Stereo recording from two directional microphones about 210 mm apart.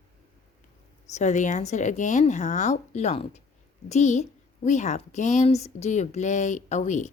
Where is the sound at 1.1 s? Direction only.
35° left (ahead or behind).